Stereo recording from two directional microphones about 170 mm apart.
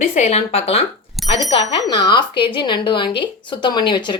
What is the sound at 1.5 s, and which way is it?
Speech, 30° left (ahead or behind).